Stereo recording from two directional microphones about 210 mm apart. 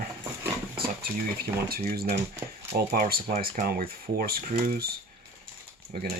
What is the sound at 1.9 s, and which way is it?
Speech, 45° right (ahead or behind).